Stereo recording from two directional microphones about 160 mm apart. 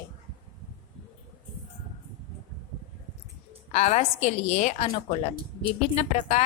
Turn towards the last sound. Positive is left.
turn(degrees=45)  # may be behind; listen again after turning